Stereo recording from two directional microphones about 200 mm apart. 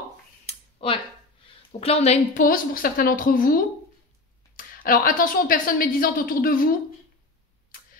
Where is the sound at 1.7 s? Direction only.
30° left (ahead or behind).